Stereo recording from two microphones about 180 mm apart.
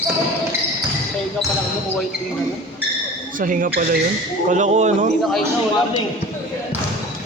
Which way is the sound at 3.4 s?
50° right (ahead or behind).